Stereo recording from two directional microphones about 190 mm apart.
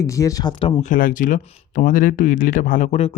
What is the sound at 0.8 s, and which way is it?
Speech, 45° left (ahead or behind).